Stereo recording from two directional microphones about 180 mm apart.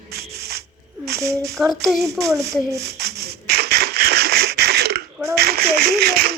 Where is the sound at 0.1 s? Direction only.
60° right (ahead or behind).